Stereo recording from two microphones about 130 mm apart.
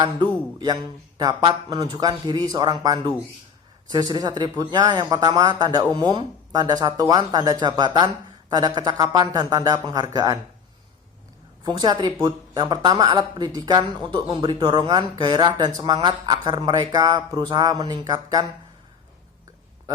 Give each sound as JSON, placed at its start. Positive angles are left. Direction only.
{"t": 0.0, "sound": "speech", "side_deg": -35}
{"t": 11.6, "sound": "speech", "side_deg": -30}